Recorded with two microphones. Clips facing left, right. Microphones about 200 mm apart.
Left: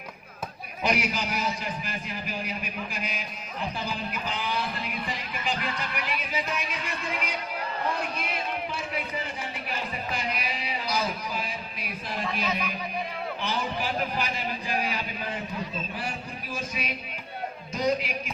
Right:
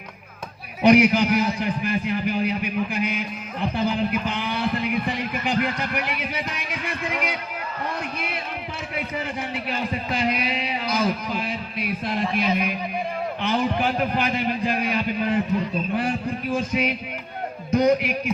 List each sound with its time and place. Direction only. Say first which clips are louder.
0.8 s a man's voice: right 12 dB; 60° right (ahead or behind)
9.6 s a man's voice: right 5 dB; 55° right (ahead or behind)
13.4 s a man's voice: right 9 dB; 60° right (ahead or behind)